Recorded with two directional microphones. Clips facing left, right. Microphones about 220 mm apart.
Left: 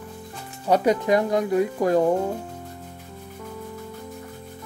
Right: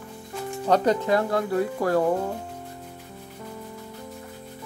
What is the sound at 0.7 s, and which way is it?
Speech, 10° left (ahead or behind).